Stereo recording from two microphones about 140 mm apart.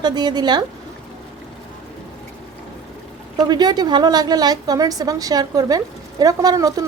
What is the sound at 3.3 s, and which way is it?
A woman's voice, 30° right (ahead or behind).